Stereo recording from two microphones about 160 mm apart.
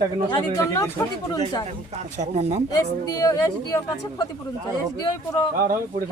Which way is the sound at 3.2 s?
20° left (ahead or behind).